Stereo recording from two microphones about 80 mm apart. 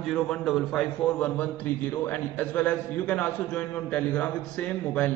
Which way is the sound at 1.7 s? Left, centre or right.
Centre.